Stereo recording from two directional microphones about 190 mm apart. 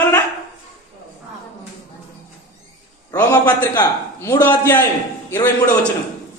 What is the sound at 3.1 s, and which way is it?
A man's voice, 10° left (ahead or behind).